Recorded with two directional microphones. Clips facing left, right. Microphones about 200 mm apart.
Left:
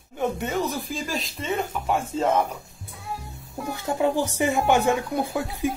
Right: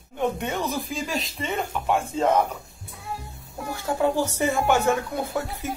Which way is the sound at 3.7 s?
15° left (ahead or behind).